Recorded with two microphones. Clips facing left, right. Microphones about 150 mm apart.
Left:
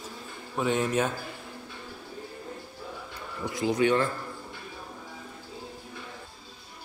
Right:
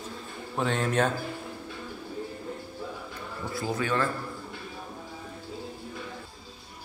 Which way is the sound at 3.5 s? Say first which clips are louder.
Left 5 dB; 15° left (ahead or behind).